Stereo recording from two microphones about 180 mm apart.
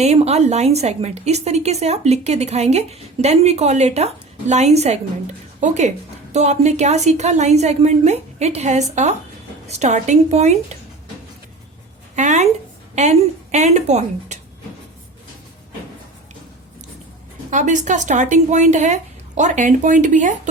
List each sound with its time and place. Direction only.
0.0 s a woman's voice: 35° right (ahead or behind)
12.1 s a woman's voice: 40° right (ahead or behind)
17.5 s speech: 45° right (ahead or behind)